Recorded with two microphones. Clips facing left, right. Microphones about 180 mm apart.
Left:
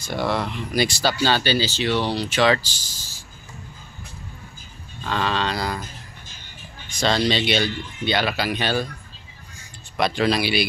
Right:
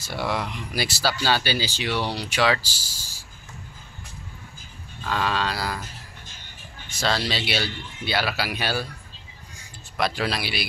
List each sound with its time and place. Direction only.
0.0 s speech: 10° right (ahead or behind)
5.0 s speech: 5° right (ahead or behind)
6.9 s speech: 5° right (ahead or behind)
9.9 s speech: 5° right (ahead or behind)